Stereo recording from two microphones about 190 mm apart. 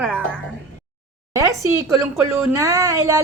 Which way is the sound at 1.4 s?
15° right (ahead or behind).